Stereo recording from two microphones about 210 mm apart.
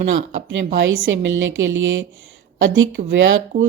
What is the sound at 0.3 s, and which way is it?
Speech, 60° right (ahead or behind).